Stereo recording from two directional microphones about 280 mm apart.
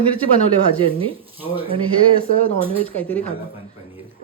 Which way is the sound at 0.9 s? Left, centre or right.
Centre.